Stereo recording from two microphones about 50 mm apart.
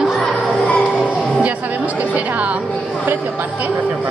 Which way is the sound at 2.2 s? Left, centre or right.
Right.